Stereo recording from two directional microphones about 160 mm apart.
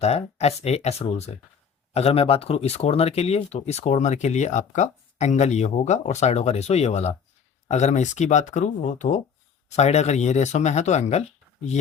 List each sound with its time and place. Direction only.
0.0 s speech: 40° left (ahead or behind)